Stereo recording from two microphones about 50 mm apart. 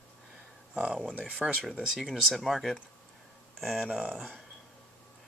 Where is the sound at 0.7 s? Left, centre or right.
Right.